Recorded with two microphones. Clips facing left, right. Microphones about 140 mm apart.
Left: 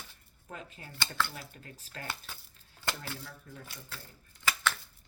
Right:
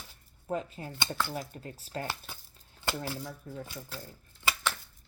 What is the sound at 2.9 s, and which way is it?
Speech, 15° right (ahead or behind).